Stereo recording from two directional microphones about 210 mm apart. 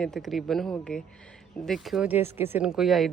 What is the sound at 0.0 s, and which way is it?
Speech, centre (ahead or behind).